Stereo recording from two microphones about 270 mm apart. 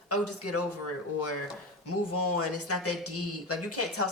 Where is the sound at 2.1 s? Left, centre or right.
Left.